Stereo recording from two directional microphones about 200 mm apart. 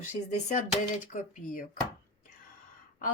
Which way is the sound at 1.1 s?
45° left (ahead or behind).